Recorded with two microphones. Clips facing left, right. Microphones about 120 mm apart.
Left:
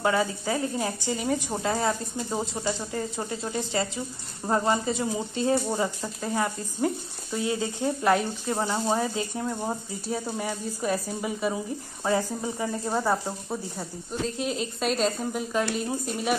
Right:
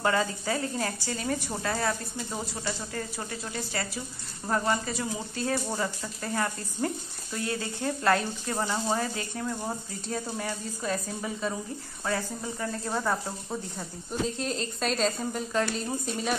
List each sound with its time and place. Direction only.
0.0 s speech: 15° left (ahead or behind)